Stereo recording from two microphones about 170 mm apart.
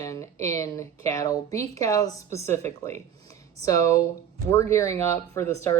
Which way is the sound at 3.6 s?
20° left (ahead or behind).